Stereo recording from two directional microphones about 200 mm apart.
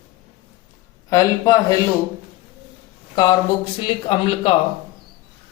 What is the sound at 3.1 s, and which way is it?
A man's voice, 20° left (ahead or behind).